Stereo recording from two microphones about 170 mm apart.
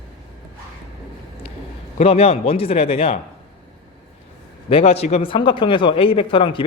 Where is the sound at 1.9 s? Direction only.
35° left (ahead or behind).